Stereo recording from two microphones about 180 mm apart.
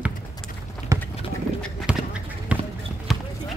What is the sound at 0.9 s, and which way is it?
Run, 20° right (ahead or behind).